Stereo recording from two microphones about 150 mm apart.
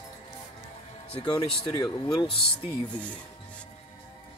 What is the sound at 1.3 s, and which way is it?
Speech, 25° left (ahead or behind).